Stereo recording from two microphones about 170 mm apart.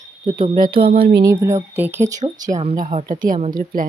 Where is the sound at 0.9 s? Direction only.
65° right (ahead or behind).